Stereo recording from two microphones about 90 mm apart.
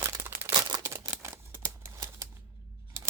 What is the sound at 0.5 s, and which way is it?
Crumpling, 45° right (ahead or behind).